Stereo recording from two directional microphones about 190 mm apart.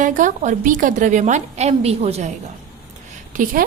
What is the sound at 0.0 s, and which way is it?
A woman's voice, 45° right (ahead or behind).